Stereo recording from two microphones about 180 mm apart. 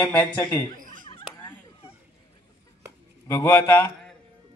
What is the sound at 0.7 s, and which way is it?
Laughter, 50° right (ahead or behind).